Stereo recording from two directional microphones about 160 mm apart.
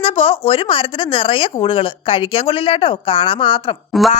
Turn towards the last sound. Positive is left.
turn(degrees=0)  # may be behind; listen again after turning